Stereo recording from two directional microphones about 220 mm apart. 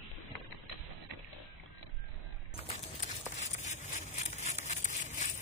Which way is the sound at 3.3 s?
30° left (ahead or behind).